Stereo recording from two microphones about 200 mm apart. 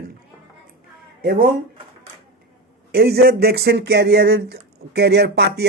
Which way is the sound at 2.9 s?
55° right (ahead or behind).